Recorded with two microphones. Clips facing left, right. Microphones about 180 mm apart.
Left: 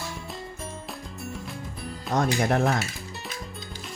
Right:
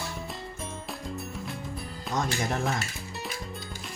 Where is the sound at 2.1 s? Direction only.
60° left (ahead or behind).